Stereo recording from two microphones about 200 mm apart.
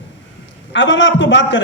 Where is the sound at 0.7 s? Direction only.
65° left (ahead or behind).